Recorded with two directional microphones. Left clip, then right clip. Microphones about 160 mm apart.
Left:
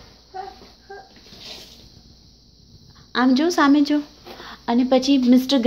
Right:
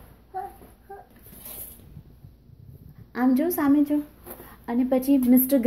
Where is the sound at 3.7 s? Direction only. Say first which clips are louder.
Left 4 dB; 40° left (ahead or behind).